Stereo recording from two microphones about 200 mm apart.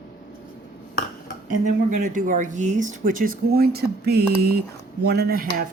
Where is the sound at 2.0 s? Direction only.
40° right (ahead or behind).